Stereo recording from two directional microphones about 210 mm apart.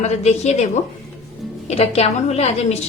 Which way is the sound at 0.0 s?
30° left (ahead or behind).